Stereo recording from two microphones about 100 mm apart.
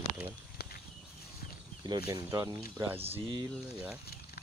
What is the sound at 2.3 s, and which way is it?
Speech, 30° right (ahead or behind).